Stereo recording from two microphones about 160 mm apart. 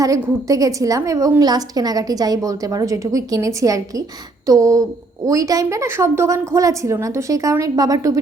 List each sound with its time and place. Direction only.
0.0 s a woman's voice: 20° right (ahead or behind)